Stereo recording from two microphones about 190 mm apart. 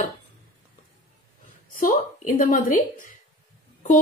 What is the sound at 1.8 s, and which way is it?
A woman's voice, 45° left (ahead or behind).